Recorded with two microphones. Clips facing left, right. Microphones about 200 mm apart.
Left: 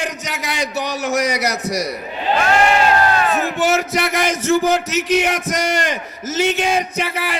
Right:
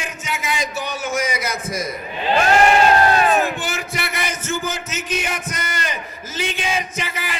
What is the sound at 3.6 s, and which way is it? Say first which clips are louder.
Speech: left 9 dB; 70° left (ahead or behind).